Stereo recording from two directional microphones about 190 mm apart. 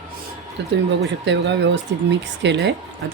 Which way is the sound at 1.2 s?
70° right (ahead or behind).